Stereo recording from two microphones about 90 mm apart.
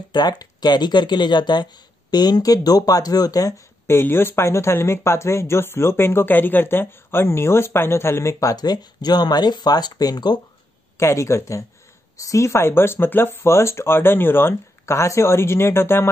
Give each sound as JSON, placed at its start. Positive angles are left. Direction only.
{"t": 0.1, "sound": "speech", "side_deg": 50}
{"t": 3.8, "sound": "speech", "side_deg": 25}
{"t": 11.0, "sound": "speech", "side_deg": 30}